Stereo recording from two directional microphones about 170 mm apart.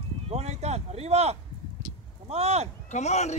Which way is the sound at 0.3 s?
40° right (ahead or behind).